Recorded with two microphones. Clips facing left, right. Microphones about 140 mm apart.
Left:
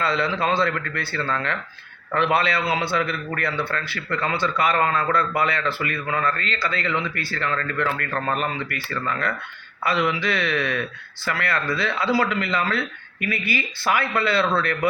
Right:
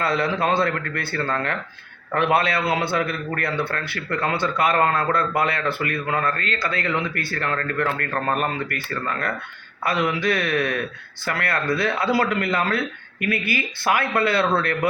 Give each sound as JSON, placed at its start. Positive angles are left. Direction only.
{"t": 0.0, "sound": "a man's voice", "side_deg": -55}